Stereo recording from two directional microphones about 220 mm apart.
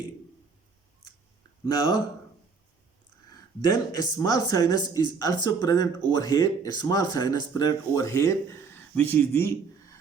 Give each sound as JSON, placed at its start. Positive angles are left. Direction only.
{"t": 1.6, "sound": "speech", "side_deg": 15}
{"t": 3.6, "sound": "speech", "side_deg": 15}